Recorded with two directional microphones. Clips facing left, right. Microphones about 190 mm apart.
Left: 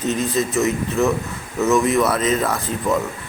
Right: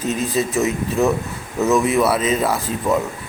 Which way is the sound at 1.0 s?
15° right (ahead or behind).